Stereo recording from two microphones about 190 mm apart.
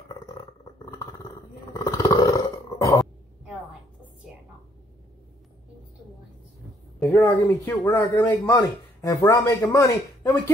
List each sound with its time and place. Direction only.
1.7 s roar: 15° left (ahead or behind)
7.0 s speech: 10° left (ahead or behind)